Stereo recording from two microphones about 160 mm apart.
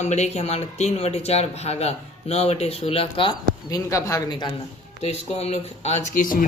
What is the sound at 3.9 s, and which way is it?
Speech, 20° left (ahead or behind).